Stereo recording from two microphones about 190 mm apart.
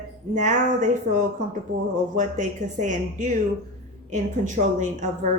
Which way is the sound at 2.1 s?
40° right (ahead or behind).